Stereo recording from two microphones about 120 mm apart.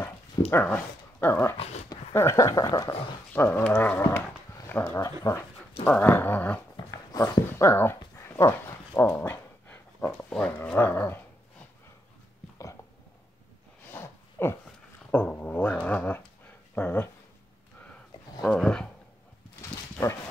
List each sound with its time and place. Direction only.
0.5 s speech: 15° left (ahead or behind)
3.3 s speech: 20° left (ahead or behind)
6.9 s dog: 30° left (ahead or behind)
10.3 s speech: 10° left (ahead or behind)
13.9 s a sound: 20° left (ahead or behind)
15.0 s cat: 15° left (ahead or behind)
16.7 s speech: 15° left (ahead or behind)
18.4 s speech: 5° left (ahead or behind)